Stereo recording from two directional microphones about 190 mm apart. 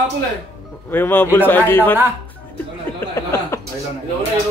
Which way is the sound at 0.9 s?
10° left (ahead or behind).